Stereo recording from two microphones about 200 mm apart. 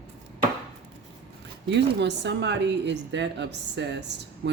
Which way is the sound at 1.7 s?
60° right (ahead or behind).